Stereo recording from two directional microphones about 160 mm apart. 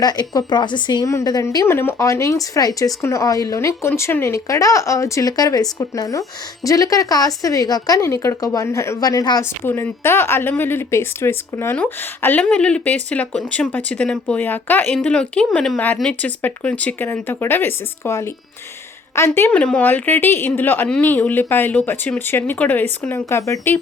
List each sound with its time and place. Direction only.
0.0 s a woman's voice: 25° left (ahead or behind)